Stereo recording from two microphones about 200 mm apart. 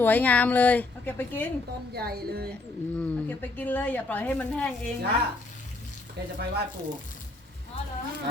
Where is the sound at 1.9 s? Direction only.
50° right (ahead or behind).